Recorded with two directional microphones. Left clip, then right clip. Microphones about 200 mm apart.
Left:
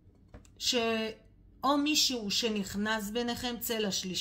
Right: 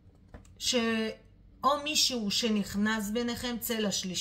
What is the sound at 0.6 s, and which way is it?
A woman's voice, 25° left (ahead or behind).